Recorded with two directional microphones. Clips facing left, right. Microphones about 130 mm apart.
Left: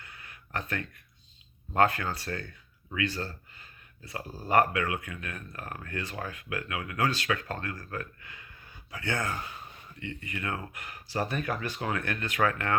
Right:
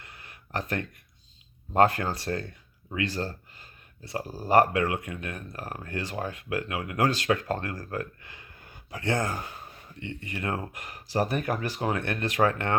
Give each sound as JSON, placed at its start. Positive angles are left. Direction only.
{"t": 0.5, "sound": "speech", "side_deg": -35}
{"t": 8.6, "sound": "a sound", "side_deg": -45}
{"t": 10.1, "sound": "speech", "side_deg": -35}